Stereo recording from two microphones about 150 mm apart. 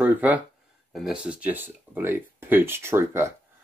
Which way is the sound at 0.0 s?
10° right (ahead or behind).